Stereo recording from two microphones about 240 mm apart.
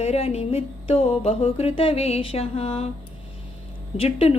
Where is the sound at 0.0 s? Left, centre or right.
Left.